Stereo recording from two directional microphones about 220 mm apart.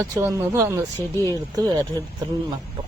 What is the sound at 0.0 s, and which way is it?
Speech, 15° right (ahead or behind).